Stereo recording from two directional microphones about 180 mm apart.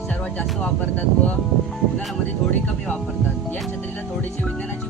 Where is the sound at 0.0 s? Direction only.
5° left (ahead or behind).